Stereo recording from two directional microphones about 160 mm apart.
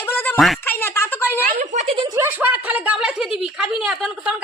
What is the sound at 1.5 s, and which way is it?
Speech, 55° right (ahead or behind).